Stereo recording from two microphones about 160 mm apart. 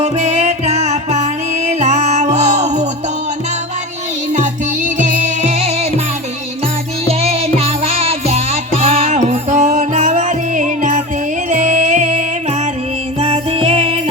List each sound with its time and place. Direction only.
0.0 s music: 40° right (ahead or behind)
4.3 s music: 50° right (ahead or behind)
7.1 s music: 40° right (ahead or behind)